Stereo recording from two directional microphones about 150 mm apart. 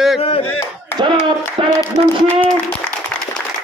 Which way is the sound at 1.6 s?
35° right (ahead or behind).